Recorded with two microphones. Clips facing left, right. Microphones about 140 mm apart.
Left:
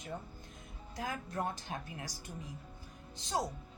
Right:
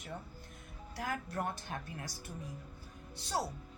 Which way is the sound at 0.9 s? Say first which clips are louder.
Even; 20° left (ahead or behind).